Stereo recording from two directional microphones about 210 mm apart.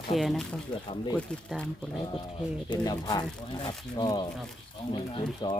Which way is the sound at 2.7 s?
20° left (ahead or behind).